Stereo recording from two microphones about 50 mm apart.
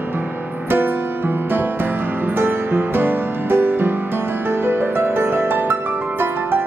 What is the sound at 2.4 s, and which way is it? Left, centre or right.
Music, right.